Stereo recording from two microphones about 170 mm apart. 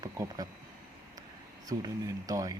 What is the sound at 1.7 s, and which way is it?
Speech, 20° right (ahead or behind).